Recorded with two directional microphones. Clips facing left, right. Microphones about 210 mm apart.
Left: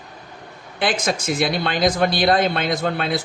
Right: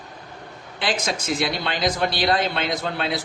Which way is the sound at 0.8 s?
50° left (ahead or behind).